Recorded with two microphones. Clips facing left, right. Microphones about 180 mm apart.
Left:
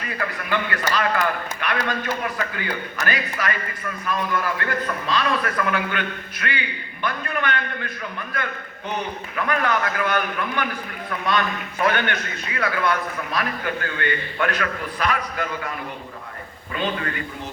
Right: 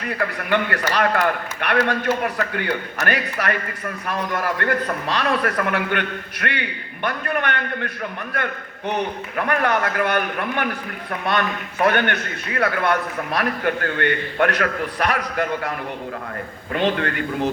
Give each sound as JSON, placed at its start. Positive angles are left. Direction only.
{"t": 0.1, "sound": "a man's voice", "side_deg": -60}
{"t": 9.3, "sound": "a man's voice", "side_deg": -55}
{"t": 16.7, "sound": "a man's voice", "side_deg": -70}